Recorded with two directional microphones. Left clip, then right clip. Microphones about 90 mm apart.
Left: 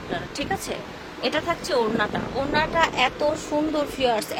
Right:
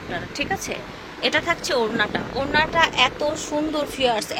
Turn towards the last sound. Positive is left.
turn(degrees=-15)  # may be behind; listen again after turning